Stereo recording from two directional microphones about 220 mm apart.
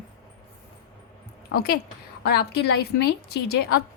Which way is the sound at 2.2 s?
50° left (ahead or behind).